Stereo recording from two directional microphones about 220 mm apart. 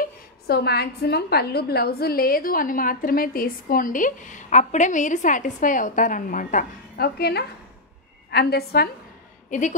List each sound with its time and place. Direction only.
0.5 s a woman's voice: 45° left (ahead or behind)
9.5 s a woman's voice: 35° left (ahead or behind)